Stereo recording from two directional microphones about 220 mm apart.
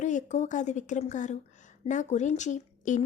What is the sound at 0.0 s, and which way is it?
Speech, 35° left (ahead or behind).